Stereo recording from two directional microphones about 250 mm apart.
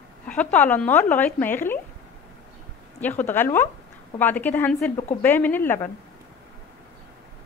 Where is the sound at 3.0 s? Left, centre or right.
Centre.